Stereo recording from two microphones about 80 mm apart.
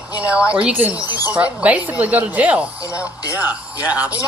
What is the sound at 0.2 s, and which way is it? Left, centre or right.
A woman's voice, centre.